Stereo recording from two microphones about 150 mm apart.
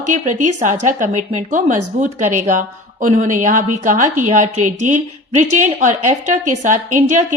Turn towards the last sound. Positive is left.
turn(degrees=-55)  # may be behind; listen again after turning